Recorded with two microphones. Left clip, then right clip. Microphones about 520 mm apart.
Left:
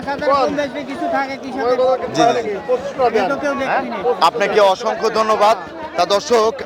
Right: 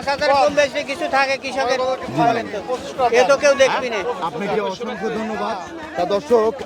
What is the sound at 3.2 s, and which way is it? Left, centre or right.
Speech, right.